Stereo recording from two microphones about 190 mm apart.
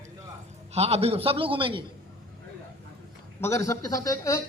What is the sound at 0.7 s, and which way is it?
A man's voice, 35° right (ahead or behind).